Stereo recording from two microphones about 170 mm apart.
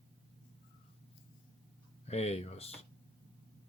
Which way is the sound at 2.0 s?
40° left (ahead or behind).